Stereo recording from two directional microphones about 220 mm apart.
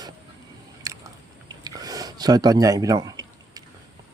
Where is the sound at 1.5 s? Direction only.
15° right (ahead or behind).